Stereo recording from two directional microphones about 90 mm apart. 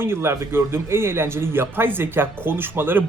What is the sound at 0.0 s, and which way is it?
Speech, 30° right (ahead or behind).